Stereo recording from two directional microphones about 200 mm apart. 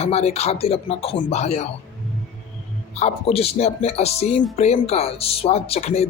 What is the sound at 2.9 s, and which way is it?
Speech, 30° left (ahead or behind).